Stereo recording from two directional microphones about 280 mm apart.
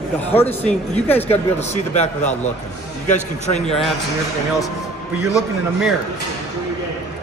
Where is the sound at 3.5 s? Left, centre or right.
Centre.